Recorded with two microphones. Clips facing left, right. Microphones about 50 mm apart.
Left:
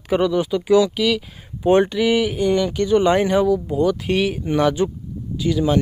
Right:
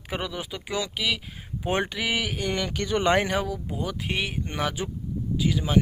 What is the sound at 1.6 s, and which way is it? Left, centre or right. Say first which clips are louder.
Speech: left 11 dB; right.